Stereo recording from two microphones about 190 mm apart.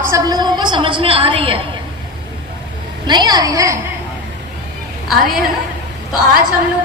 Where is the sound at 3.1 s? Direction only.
20° right (ahead or behind).